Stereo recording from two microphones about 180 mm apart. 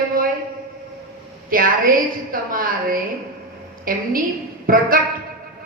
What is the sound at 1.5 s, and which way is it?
Speech, 50° right (ahead or behind).